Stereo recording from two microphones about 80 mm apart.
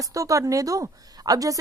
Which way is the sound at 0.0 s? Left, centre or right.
Right.